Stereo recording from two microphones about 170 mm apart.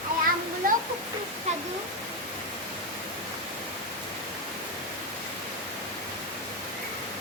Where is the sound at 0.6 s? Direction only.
55° right (ahead or behind).